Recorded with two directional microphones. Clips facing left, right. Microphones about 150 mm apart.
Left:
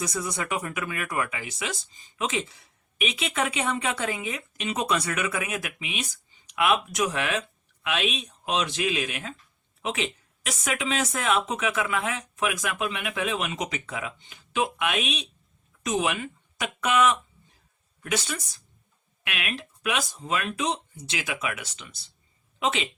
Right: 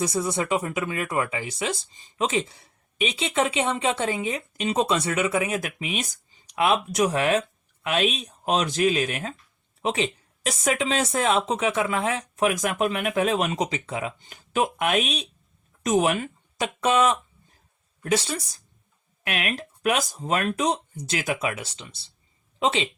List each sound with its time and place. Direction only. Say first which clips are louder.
0.0 s speech: right 5 dB; 30° right (ahead or behind)
14.3 s speech: right 2 dB; 45° right (ahead or behind)